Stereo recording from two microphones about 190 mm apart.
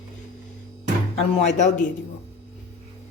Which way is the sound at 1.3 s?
35° left (ahead or behind).